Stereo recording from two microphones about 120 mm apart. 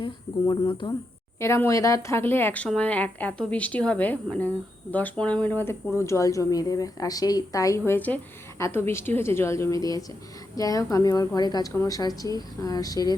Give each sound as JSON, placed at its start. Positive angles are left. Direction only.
{"t": 0.0, "sound": "speech", "side_deg": 35}
{"t": 1.4, "sound": "a woman's voice", "side_deg": 20}
{"t": 7.9, "sound": "a woman's voice", "side_deg": 15}